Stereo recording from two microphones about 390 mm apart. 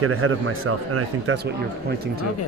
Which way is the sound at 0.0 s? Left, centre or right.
Right.